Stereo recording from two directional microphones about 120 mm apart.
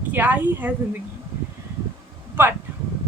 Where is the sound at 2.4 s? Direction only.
20° right (ahead or behind).